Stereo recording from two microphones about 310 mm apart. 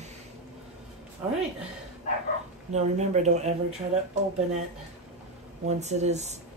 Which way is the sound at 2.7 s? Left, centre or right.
Right.